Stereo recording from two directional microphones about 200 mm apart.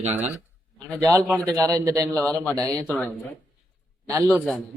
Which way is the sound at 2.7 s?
5° left (ahead or behind).